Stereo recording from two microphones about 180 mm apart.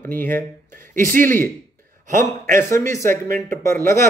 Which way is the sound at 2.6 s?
15° left (ahead or behind).